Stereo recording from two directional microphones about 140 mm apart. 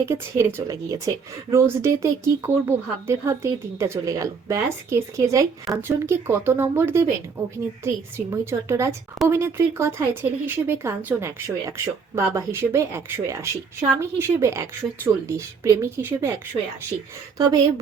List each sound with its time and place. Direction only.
0.0 s speech: 20° right (ahead or behind)